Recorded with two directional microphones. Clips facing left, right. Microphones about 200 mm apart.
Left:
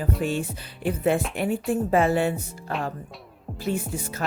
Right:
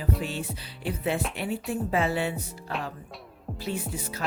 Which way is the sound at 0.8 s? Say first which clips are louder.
Left 6 dB; 50° left (ahead or behind).